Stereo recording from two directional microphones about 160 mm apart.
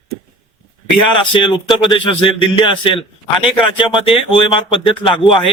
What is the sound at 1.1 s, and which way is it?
Speech, 30° left (ahead or behind).